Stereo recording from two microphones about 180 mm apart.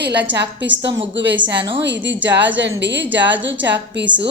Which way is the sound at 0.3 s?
80° right.